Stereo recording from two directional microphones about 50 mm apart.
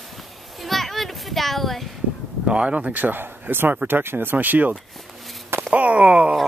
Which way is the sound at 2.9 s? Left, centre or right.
Right.